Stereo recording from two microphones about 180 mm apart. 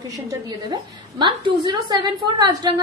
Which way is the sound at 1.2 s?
25° right (ahead or behind).